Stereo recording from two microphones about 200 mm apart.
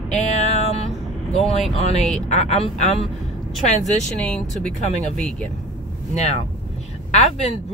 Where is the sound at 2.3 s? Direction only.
35° left (ahead or behind).